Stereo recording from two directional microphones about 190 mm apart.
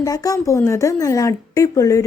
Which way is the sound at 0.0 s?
20° left (ahead or behind).